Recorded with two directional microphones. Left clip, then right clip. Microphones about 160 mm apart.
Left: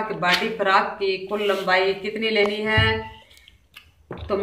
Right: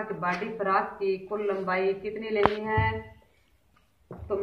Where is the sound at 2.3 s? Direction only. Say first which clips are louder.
Left 3 dB; 20° left (ahead or behind).